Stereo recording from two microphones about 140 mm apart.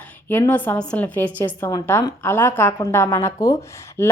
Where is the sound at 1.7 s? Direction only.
25° left (ahead or behind).